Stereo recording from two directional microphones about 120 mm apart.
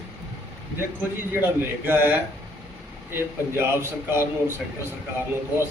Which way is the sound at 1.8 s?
15° right (ahead or behind).